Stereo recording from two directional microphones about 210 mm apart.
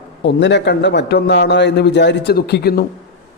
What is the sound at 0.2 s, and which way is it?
A man's voice, 55° left (ahead or behind).